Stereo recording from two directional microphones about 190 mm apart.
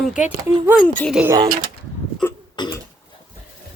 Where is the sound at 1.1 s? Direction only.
10° right (ahead or behind).